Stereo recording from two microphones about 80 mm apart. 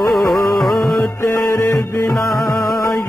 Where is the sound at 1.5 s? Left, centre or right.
Left.